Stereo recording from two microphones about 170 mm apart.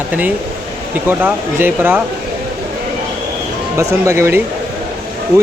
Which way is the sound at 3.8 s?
15° right (ahead or behind).